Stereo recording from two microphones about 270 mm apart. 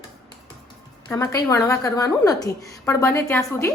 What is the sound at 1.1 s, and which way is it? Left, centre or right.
A woman's voice, centre.